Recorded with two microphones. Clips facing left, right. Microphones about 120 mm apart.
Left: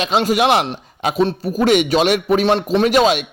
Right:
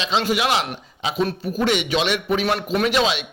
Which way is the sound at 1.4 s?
40° left (ahead or behind).